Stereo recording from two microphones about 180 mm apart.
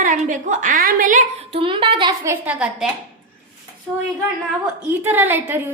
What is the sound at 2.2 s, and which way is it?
Speech, 10° right (ahead or behind).